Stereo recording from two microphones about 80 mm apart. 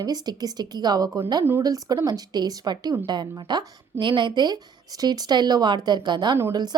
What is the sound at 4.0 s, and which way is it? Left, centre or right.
Speech, right.